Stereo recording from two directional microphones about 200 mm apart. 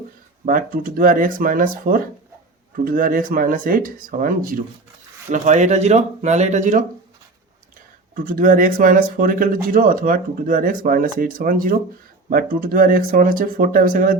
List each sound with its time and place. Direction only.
0.4 s speech: 45° right (ahead or behind)
8.1 s speech: 45° right (ahead or behind)